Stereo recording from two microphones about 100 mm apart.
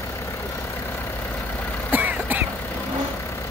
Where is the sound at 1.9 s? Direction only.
20° right (ahead or behind).